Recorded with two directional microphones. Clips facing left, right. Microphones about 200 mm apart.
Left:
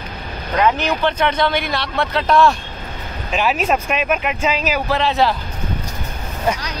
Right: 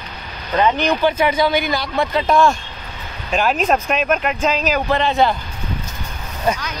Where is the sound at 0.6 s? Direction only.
Centre (ahead or behind).